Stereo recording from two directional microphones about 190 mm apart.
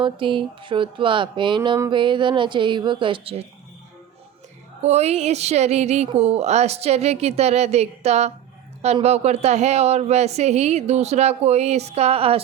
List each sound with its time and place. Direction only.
0.0 s music: 25° right (ahead or behind)
4.8 s speech: 35° right (ahead or behind)